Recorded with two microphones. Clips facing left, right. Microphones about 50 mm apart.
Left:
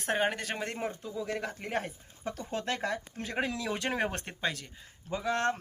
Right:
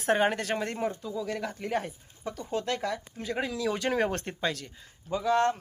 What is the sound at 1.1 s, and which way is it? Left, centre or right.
Speech, left.